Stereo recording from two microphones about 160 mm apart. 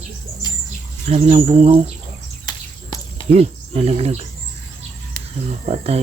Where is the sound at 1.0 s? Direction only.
40° right (ahead or behind).